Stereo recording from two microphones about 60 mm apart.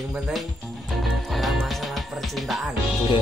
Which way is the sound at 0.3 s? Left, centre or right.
Centre.